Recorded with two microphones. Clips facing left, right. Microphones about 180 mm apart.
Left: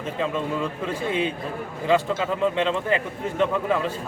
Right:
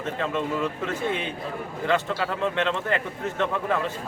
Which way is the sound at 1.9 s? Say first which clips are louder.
Left 4 dB; 10° left (ahead or behind).